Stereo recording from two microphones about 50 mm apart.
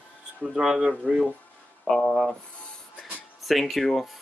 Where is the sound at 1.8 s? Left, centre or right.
Centre.